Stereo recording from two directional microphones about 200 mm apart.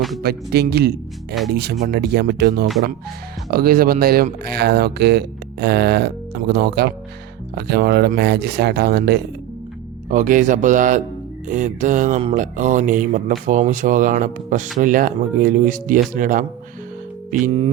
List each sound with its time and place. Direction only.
0.2 s speech: 50° right (ahead or behind)
1.3 s speech: centre (ahead or behind)
1.8 s speech: 55° right (ahead or behind)
10.1 s mantra: 40° right (ahead or behind)
17.4 s mantra: 30° right (ahead or behind)